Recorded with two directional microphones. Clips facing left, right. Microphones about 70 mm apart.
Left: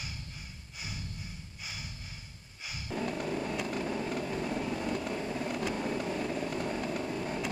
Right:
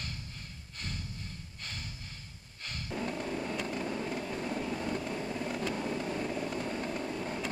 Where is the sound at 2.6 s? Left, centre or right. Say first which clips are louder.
Left 1 dB; centre.